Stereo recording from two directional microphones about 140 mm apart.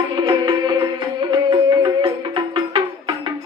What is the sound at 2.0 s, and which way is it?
Music, 35° right (ahead or behind).